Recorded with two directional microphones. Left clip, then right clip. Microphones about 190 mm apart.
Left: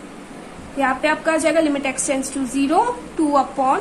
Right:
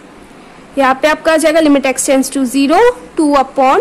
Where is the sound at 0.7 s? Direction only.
50° right (ahead or behind).